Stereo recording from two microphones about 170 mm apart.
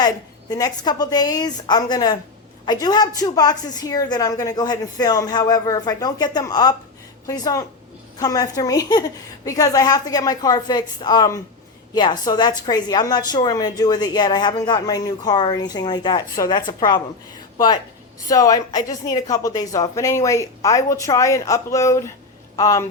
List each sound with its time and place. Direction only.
0.5 s a woman's voice: 25° left (ahead or behind)
18.3 s a woman's voice: 20° left (ahead or behind)